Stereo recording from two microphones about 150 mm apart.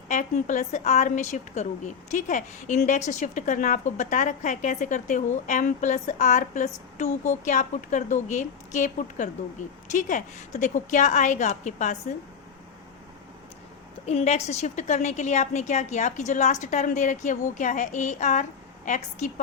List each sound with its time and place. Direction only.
0.1 s a woman's voice: 55° left (ahead or behind)
14.1 s a woman's voice: 45° left (ahead or behind)